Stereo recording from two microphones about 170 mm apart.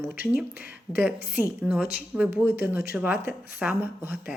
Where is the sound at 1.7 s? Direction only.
10° right (ahead or behind).